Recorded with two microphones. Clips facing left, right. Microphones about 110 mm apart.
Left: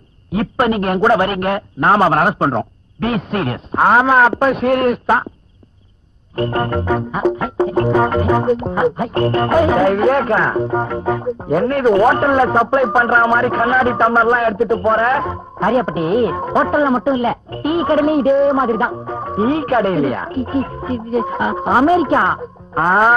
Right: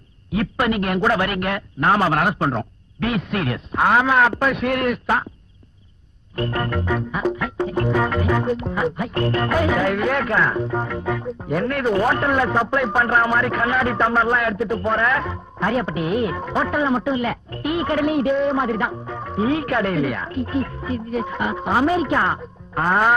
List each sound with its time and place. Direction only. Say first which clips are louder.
0.3 s music: left 4 dB; 35° left (ahead or behind)
6.3 s music: left 6 dB; 35° left (ahead or behind)